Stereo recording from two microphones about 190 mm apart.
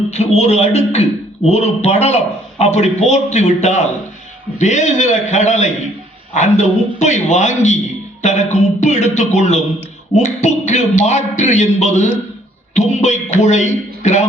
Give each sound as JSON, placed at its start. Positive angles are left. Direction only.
{"t": 0.1, "sound": "speech", "side_deg": 35}